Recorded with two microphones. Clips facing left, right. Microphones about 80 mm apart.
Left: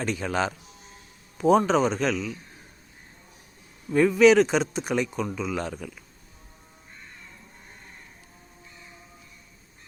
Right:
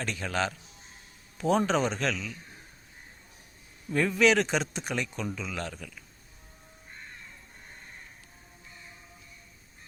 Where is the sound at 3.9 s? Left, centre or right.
Centre.